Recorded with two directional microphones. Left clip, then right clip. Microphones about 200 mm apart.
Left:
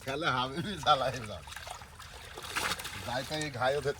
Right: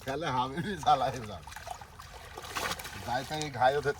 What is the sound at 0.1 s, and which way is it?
Speech, 5° right (ahead or behind).